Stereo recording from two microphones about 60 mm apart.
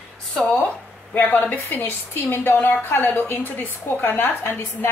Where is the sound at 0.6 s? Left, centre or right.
Left.